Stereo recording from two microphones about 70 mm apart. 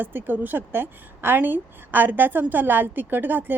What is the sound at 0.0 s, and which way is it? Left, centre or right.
A woman's voice, right.